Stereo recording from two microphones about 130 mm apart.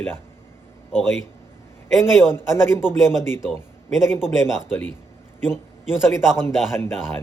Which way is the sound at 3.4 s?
5° right (ahead or behind).